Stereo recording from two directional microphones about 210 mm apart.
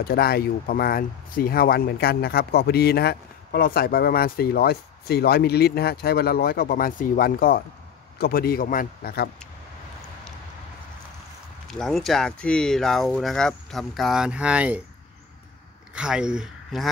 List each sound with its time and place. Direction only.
0.0 s speech: 45° left (ahead or behind)
11.6 s speech: centre (ahead or behind)
15.9 s speech: 5° right (ahead or behind)